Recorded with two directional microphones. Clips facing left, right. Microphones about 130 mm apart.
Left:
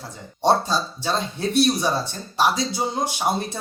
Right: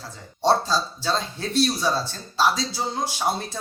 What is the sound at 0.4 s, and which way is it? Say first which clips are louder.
Speech: left 1 dB; 15° left (ahead or behind).